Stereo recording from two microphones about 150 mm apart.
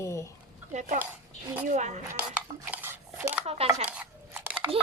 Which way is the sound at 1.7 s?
50° right (ahead or behind).